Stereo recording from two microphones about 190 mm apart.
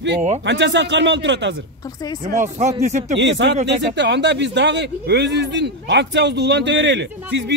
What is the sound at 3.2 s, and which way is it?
Speech, 70° right (ahead or behind).